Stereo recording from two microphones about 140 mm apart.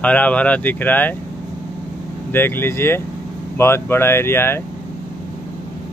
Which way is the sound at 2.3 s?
15° left (ahead or behind).